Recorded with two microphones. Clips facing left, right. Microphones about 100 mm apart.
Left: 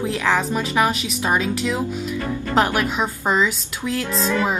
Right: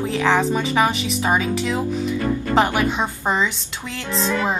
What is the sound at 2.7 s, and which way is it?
Speech, 20° right (ahead or behind).